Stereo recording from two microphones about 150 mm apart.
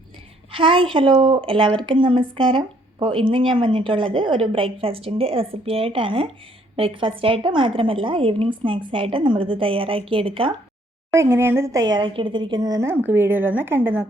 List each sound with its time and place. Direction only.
0.5 s speech: 35° right (ahead or behind)
11.1 s a woman's voice: 15° right (ahead or behind)